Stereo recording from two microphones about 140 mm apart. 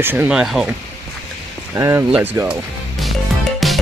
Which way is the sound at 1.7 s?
20° right (ahead or behind).